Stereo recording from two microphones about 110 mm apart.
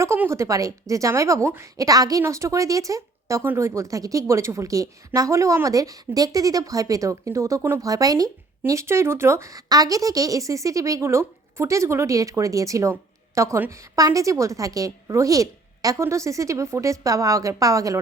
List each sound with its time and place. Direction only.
0.0 s a woman's voice: 25° right (ahead or behind)